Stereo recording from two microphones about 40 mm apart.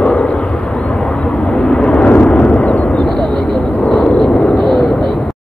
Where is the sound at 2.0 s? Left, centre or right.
Left.